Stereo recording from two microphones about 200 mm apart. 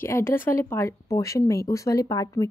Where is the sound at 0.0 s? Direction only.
10° left (ahead or behind).